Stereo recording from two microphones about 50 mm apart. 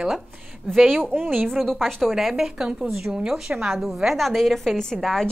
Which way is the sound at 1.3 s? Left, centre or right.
Centre.